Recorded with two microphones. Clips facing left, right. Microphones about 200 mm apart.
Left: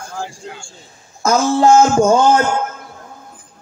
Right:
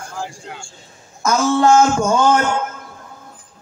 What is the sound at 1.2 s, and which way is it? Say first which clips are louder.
Speech: left 2 dB; 30° left (ahead or behind).